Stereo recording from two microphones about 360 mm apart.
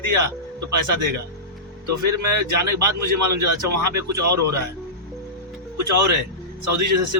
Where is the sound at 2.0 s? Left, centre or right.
Right.